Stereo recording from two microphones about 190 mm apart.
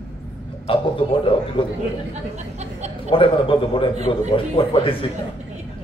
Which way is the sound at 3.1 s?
30° left (ahead or behind).